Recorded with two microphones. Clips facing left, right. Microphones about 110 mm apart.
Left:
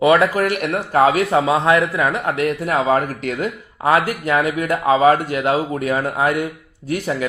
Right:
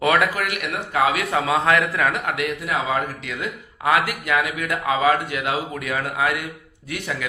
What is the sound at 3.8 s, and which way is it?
Speech, 35° left (ahead or behind).